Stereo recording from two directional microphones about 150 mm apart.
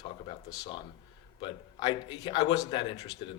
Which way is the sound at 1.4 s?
30° left (ahead or behind).